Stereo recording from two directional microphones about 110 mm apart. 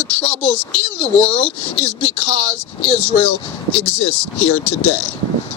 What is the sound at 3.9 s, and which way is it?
Speech, 70° left (ahead or behind).